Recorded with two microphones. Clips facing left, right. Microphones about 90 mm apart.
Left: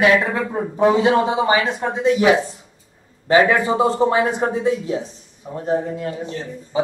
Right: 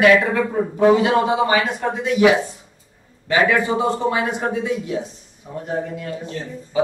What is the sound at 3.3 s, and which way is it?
Speech, 30° left (ahead or behind).